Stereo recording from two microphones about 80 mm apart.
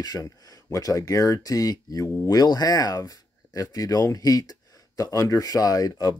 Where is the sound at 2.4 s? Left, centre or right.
Left.